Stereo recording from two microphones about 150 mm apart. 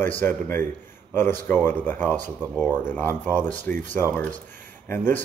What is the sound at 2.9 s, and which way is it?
Speech, 10° left (ahead or behind).